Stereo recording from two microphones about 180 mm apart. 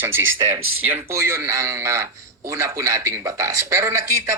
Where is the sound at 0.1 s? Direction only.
90° right.